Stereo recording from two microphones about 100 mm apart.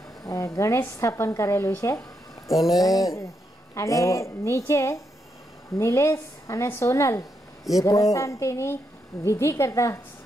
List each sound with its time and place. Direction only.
0.2 s a sound: 35° left (ahead or behind)
0.6 s a woman's voice: 30° left (ahead or behind)
2.4 s speech: centre (ahead or behind)
2.8 s a woman's voice: 35° left (ahead or behind)